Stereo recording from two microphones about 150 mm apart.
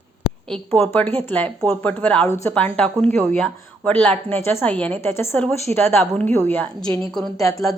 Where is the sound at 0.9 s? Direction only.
15° left (ahead or behind).